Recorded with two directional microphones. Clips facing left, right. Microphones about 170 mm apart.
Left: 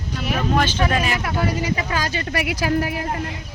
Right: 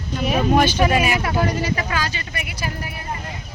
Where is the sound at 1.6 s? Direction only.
15° left (ahead or behind).